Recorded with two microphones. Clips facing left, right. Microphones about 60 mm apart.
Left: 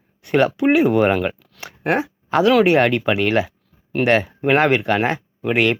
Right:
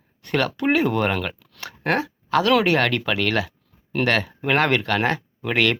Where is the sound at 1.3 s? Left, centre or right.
Centre.